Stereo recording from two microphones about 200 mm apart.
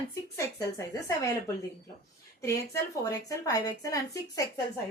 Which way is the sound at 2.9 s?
15° left (ahead or behind).